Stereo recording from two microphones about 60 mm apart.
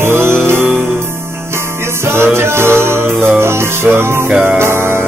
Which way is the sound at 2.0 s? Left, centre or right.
Right.